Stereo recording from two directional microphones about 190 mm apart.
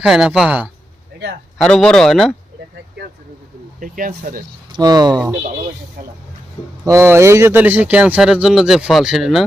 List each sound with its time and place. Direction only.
0.0 s speech: 5° right (ahead or behind)
3.8 s speech: 45° right (ahead or behind)
4.8 s speech: 20° right (ahead or behind)
6.8 s speech: 15° right (ahead or behind)